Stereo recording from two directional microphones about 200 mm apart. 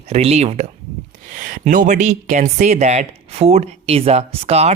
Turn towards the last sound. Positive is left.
turn(degrees=-30)  # may be behind; listen again after turning